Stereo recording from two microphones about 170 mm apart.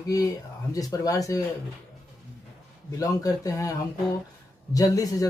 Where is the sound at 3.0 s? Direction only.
20° left (ahead or behind).